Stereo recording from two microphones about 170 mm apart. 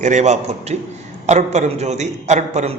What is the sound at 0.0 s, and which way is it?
A man's voice, 45° right (ahead or behind).